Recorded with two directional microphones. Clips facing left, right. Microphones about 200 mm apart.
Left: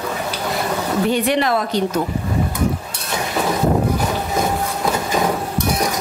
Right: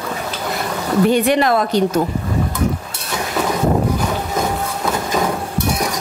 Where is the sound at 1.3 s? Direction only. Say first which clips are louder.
Right 3 dB; 45° right (ahead or behind).